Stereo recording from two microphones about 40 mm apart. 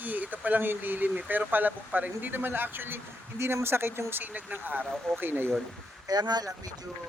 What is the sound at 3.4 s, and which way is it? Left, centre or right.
Speech, right.